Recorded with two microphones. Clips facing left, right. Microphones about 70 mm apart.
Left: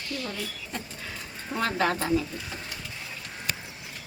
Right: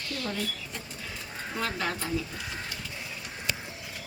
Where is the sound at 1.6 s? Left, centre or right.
Left.